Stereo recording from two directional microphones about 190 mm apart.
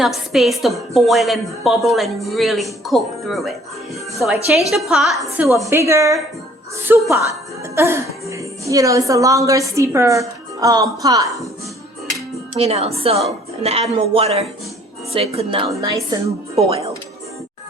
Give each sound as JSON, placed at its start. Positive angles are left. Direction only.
{"t": 0.0, "sound": "a woman's voice", "side_deg": 0}
{"t": 4.7, "sound": "a woman's voice", "side_deg": 0}
{"t": 5.7, "sound": "speech", "side_deg": -15}
{"t": 12.5, "sound": "a woman's voice", "side_deg": -30}
{"t": 16.6, "sound": "speech", "side_deg": -30}